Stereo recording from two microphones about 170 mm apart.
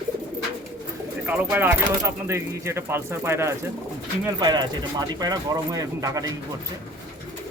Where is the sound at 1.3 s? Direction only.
10° right (ahead or behind).